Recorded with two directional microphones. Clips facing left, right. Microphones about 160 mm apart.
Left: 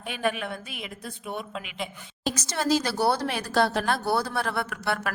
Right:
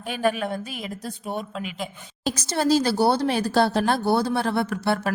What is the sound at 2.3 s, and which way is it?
Speech, 30° right (ahead or behind).